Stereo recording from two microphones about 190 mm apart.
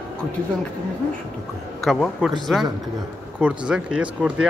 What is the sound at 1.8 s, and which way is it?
Speech, centre (ahead or behind).